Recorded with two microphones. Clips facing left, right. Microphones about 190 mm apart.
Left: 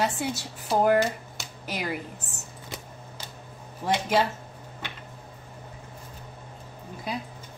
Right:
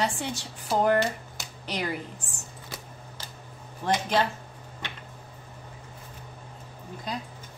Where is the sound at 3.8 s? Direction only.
10° left (ahead or behind).